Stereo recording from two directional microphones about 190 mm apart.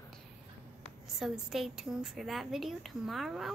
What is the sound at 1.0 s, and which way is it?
A woman's voice, centre (ahead or behind).